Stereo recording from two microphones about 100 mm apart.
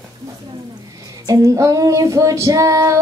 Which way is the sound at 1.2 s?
35° right (ahead or behind).